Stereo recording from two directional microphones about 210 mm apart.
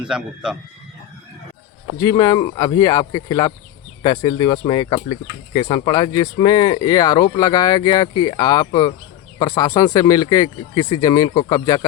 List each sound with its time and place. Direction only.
0.0 s speech: 5° right (ahead or behind)
2.0 s speech: 20° left (ahead or behind)